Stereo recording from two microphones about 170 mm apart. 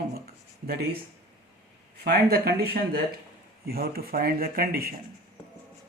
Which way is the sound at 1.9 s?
70° right (ahead or behind).